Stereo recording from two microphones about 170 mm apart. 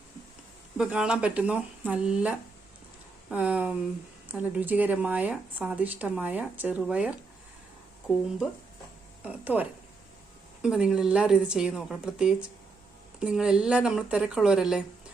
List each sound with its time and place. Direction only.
0.8 s a woman's voice: 5° right (ahead or behind)
9.2 s a woman's voice: 10° right (ahead or behind)